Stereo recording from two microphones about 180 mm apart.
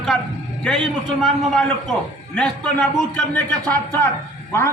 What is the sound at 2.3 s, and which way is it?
A man's voice, 5° left (ahead or behind).